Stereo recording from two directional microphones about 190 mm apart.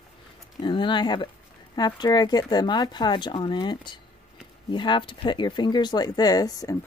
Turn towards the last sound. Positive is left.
turn(degrees=20)  # may be behind; listen again after turning